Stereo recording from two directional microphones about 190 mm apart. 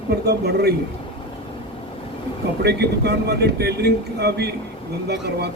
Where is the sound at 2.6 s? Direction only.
60° right (ahead or behind).